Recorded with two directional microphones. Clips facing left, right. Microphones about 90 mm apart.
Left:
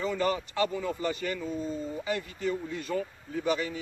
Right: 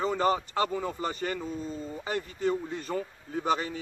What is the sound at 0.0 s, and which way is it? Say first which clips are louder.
Speech: right 2 dB; 35° right (ahead or behind).